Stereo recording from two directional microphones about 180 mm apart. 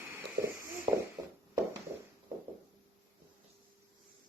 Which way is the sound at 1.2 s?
20° right (ahead or behind).